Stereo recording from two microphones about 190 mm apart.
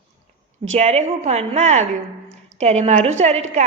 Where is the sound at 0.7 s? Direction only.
35° right (ahead or behind).